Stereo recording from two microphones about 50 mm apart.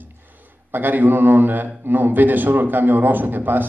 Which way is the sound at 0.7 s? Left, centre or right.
Right.